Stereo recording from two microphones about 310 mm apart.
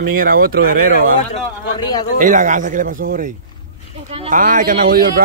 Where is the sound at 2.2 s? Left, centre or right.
Right.